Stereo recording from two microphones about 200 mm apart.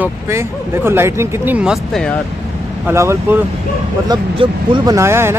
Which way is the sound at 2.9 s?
15° right (ahead or behind).